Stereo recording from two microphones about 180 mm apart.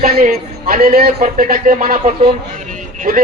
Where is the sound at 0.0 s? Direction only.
55° right (ahead or behind).